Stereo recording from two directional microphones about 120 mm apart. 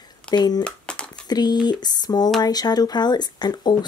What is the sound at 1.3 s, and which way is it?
Speech, 35° left (ahead or behind).